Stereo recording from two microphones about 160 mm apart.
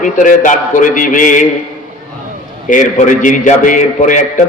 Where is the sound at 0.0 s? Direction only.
55° left (ahead or behind).